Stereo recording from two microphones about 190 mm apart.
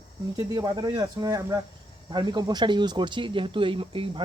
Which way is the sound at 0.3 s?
20° right (ahead or behind).